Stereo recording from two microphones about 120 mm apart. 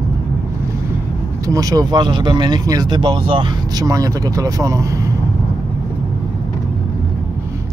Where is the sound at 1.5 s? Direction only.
30° right (ahead or behind).